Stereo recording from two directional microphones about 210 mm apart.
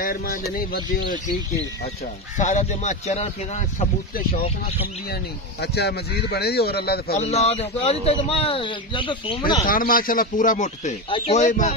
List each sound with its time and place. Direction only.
0.0 s speech: 45° left (ahead or behind)
2.3 s speech: 35° left (ahead or behind)
5.6 s speech: 50° left (ahead or behind)
7.2 s a man's voice: 30° left (ahead or behind)
9.7 s speech: 40° left (ahead or behind)